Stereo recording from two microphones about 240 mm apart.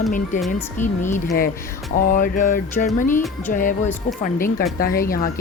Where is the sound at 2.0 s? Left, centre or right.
Left.